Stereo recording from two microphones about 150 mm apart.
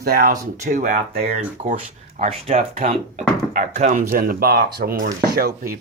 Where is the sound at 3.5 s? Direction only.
55° right (ahead or behind).